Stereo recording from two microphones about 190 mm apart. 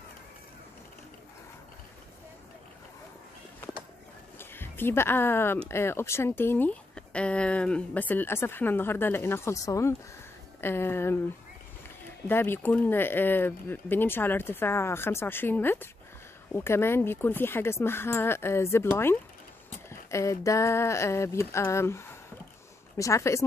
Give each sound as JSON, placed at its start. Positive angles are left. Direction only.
{"t": 4.4, "sound": "speech", "side_deg": 10}
{"t": 12.3, "sound": "speech", "side_deg": 10}